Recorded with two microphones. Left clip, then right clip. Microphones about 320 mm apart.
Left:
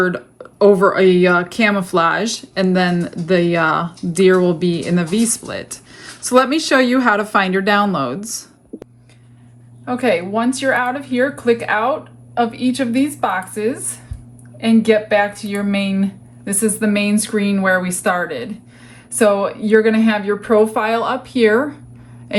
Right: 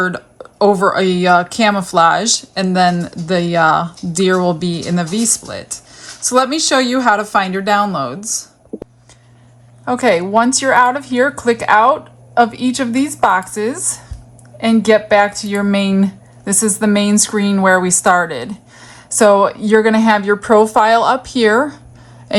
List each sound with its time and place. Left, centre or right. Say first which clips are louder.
0.0 s speech: even; centre
9.8 s speech: right 4 dB; right